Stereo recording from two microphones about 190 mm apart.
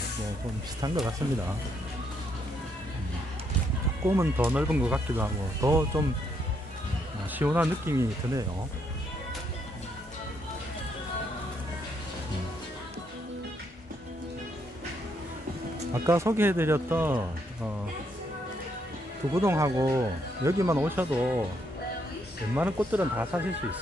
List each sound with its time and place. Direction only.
1.2 s speech: 15° right (ahead or behind)
4.0 s speech: 15° right (ahead or behind)
7.3 s speech: 10° right (ahead or behind)
16.1 s speech: 15° right (ahead or behind)
19.3 s speech: 15° right (ahead or behind)
22.8 s speech: 10° right (ahead or behind)